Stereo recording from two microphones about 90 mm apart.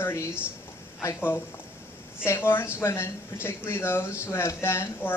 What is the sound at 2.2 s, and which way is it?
A man's voice, 25° left (ahead or behind).